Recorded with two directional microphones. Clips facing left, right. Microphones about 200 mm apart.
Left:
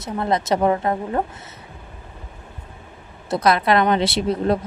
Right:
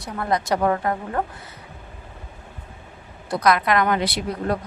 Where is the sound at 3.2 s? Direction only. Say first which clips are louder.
Left 2 dB; 25° left (ahead or behind).